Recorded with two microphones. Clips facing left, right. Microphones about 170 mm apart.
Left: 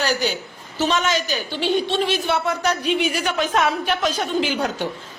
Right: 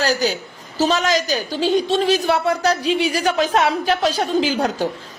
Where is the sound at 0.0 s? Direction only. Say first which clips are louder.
Right 3 dB; 35° right (ahead or behind).